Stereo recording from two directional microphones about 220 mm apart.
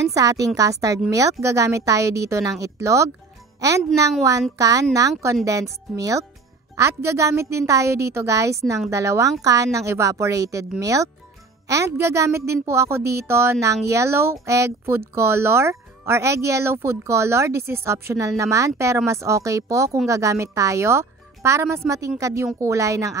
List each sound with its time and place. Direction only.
0.1 s speech: 15° right (ahead or behind)